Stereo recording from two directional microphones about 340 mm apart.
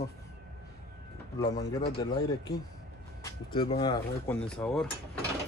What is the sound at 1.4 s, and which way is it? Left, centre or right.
Speech, centre.